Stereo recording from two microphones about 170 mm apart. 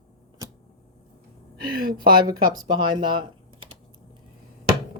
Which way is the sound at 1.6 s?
60° right (ahead or behind).